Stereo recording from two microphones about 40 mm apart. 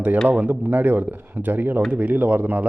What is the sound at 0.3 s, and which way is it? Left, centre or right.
Speech, right.